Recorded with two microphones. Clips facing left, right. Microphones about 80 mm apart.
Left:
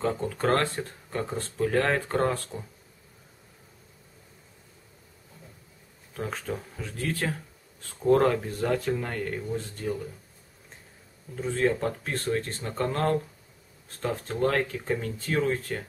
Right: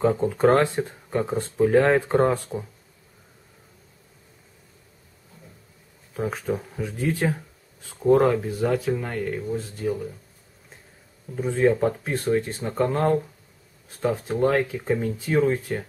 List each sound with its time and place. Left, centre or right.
0.0 s speech: centre
6.1 s speech: centre
11.3 s speech: centre